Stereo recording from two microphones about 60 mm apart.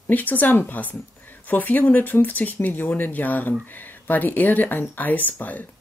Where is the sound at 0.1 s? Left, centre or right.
Left.